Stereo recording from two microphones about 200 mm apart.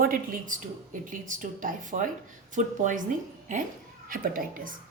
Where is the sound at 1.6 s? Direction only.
40° right (ahead or behind).